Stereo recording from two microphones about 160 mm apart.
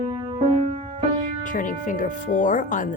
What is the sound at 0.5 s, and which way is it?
Music, 45° right (ahead or behind).